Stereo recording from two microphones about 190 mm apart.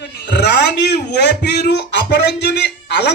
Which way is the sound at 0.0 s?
60° left (ahead or behind).